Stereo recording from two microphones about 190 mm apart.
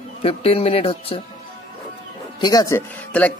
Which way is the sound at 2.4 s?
20° left (ahead or behind).